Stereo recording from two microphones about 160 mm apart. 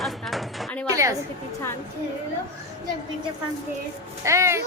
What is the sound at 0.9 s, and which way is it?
Speech, 20° right (ahead or behind).